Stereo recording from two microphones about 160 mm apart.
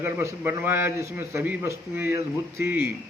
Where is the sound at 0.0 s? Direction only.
15° right (ahead or behind).